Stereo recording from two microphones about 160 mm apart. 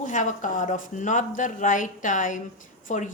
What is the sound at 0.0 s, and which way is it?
Speech, 50° left (ahead or behind).